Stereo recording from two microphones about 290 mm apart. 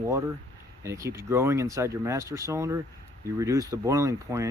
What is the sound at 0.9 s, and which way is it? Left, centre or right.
Speech, centre.